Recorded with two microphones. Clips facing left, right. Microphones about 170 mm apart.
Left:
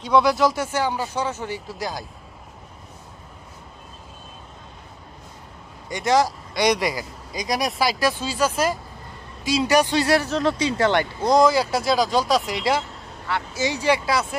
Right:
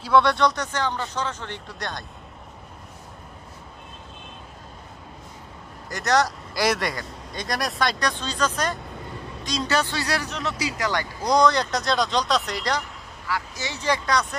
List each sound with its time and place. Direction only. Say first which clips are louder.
0.1 s speech: left 1 dB; centre (ahead or behind)
5.9 s speech: left 2 dB; centre (ahead or behind); by 10.3 s 20° left (ahead or behind)
10.3 s speech: left 7 dB; 30° left (ahead or behind)
11.2 s speech: left 2 dB; centre (ahead or behind)
12.8 s speech: left 2 dB; 20° left (ahead or behind)